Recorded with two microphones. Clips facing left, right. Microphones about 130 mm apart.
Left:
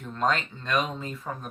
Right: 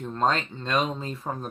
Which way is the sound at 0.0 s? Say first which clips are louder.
Right 2 dB; 35° right (ahead or behind).